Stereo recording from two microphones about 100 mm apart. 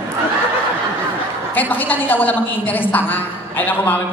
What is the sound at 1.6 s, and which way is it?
A woman's voice, 20° left (ahead or behind).